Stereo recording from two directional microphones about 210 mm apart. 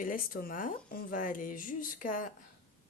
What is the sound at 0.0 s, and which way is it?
Speech, 40° left (ahead or behind).